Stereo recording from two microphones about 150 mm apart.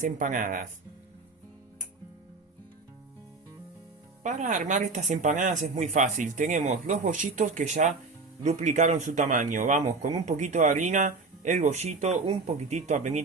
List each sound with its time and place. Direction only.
0.0 s speech: 60° right (ahead or behind)
4.2 s speech: 55° right (ahead or behind)